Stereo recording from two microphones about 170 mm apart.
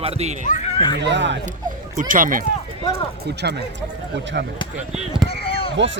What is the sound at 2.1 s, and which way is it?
Speech, 55° right (ahead or behind).